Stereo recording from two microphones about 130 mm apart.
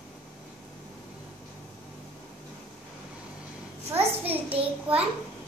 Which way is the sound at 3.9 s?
15° right (ahead or behind).